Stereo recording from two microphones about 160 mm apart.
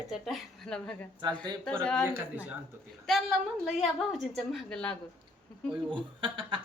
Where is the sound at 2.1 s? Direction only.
10° right (ahead or behind).